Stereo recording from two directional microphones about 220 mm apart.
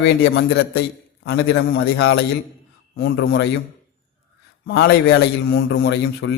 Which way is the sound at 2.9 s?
45° left (ahead or behind).